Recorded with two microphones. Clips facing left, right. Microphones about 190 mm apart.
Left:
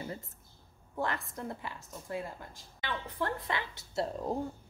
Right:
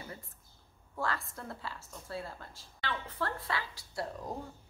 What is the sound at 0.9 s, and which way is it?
A woman's voice, 20° left (ahead or behind).